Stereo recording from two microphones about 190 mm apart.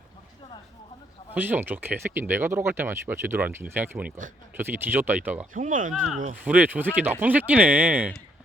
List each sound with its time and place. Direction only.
1.3 s speech: 10° right (ahead or behind)
5.5 s speech: 40° right (ahead or behind)
6.4 s speech: 10° right (ahead or behind)